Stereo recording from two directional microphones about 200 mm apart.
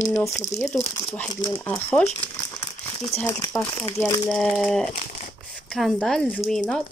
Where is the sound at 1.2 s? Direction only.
15° left (ahead or behind).